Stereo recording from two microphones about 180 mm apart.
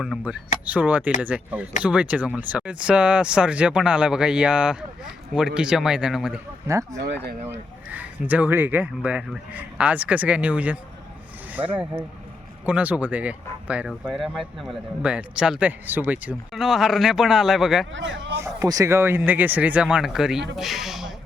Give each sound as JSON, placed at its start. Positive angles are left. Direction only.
{"t": 0.0, "sound": "speech", "side_deg": 0}
{"t": 6.7, "sound": "speech", "side_deg": -15}
{"t": 12.6, "sound": "speech", "side_deg": -10}
{"t": 17.9, "sound": "speech", "side_deg": -90}
{"t": 18.3, "sound": "speech", "side_deg": -20}